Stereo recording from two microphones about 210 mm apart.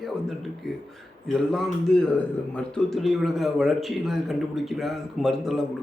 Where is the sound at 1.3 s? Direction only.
Centre (ahead or behind).